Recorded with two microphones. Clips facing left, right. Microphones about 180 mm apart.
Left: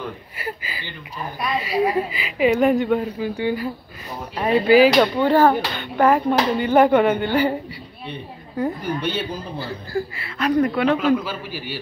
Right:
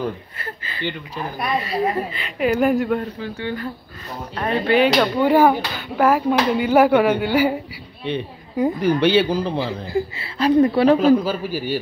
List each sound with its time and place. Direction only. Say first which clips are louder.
0.4 s speech: right 2 dB; 10° left (ahead or behind)
3.2 s speech: left 4 dB; 10° left (ahead or behind)
5.2 s speech: right 1 dB; 10° right (ahead or behind)
8.8 s a man's voice: right 9 dB; 85° right
9.9 s a man's voice: right 2 dB; 25° right (ahead or behind); by 11.8 s 45° right (ahead or behind)